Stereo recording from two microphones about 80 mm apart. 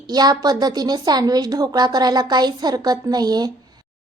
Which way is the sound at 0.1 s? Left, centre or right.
Right.